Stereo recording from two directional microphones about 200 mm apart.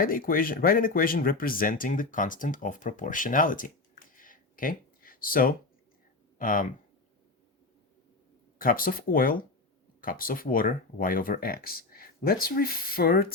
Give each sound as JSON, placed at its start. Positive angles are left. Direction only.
{"t": 0.0, "sound": "speech", "side_deg": 45}
{"t": 4.2, "sound": "a sound", "side_deg": 45}
{"t": 6.4, "sound": "speech", "side_deg": 45}
{"t": 8.5, "sound": "speech", "side_deg": 45}